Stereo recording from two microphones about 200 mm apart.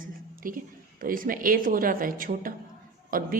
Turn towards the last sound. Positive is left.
turn(degrees=-45)  # may be behind; listen again after turning